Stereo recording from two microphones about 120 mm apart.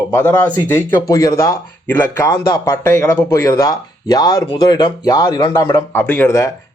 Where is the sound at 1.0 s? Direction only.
30° left (ahead or behind).